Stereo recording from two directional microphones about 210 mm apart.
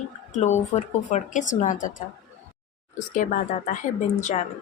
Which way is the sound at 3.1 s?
40° left (ahead or behind).